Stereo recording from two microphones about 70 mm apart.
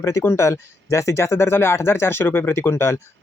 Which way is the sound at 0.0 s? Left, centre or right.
Left.